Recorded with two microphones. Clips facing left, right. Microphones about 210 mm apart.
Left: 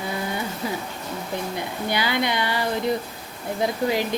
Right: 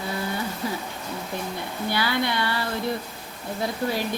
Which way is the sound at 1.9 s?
15° left (ahead or behind).